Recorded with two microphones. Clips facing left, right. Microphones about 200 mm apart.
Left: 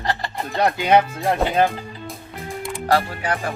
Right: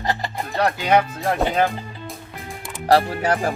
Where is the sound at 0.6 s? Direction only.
15° left (ahead or behind).